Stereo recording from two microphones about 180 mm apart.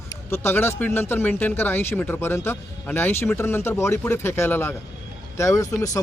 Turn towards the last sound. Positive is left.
turn(degrees=20)  # may be behind; listen again after turning